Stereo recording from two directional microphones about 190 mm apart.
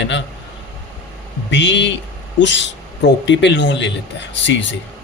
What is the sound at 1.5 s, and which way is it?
Speech, 70° left (ahead or behind).